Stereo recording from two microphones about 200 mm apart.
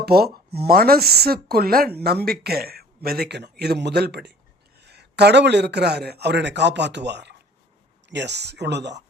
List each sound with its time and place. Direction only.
0.0 s a man's voice: 50° right (ahead or behind)